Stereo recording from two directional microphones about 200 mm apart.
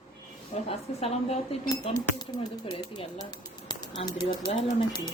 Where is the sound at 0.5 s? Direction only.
30° left (ahead or behind).